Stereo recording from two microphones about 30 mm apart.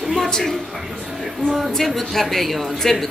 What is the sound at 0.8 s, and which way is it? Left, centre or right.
Speech, centre.